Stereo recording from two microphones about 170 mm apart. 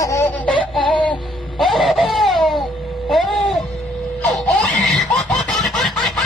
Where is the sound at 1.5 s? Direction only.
Centre (ahead or behind).